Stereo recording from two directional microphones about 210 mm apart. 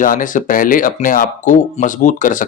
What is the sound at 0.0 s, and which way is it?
Speech, 40° left (ahead or behind).